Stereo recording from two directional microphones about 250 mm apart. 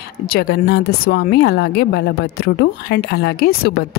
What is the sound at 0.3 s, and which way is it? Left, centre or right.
Speech, left.